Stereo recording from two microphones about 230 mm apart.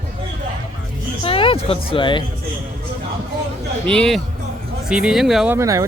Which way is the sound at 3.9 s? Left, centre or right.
Centre.